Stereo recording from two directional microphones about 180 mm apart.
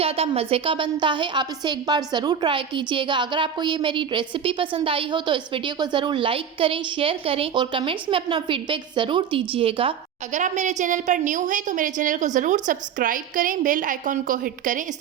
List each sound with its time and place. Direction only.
0.0 s a woman's voice: 35° right (ahead or behind)
10.3 s a woman's voice: 40° right (ahead or behind)